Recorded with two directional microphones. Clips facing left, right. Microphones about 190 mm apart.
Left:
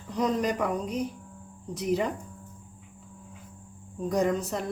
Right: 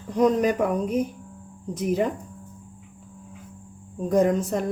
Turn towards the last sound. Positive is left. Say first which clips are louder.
# right 5 dB
turn(degrees=-50)  # may be behind; listen again after turning